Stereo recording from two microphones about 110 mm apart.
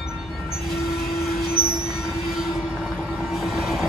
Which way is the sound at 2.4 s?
5° right (ahead or behind).